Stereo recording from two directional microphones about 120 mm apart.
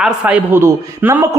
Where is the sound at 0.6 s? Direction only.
20° right (ahead or behind).